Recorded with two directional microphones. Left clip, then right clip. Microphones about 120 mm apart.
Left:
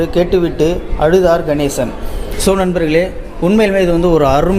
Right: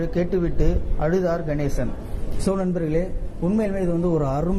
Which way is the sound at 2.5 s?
30° left (ahead or behind).